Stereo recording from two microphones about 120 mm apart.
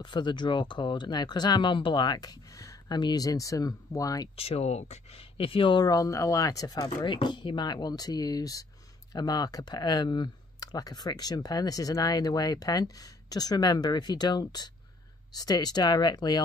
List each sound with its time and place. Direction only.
0.0 s speech: 40° left (ahead or behind)
4.4 s speech: 55° left (ahead or behind); by 16.4 s 35° left (ahead or behind)